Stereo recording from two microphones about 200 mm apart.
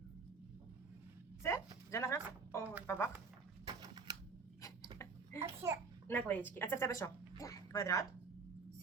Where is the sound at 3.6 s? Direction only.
20° right (ahead or behind).